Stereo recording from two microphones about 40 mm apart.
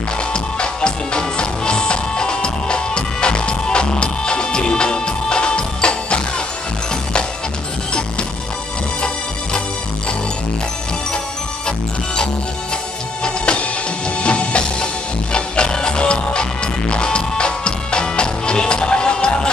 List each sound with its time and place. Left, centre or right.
0.3 s music: left
13.2 s music: left